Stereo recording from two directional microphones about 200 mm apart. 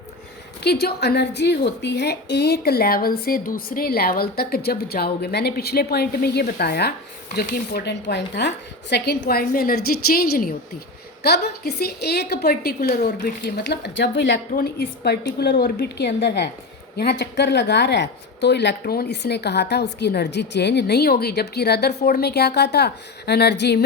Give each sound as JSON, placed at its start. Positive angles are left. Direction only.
{"t": 0.6, "sound": "a woman's voice", "side_deg": 55}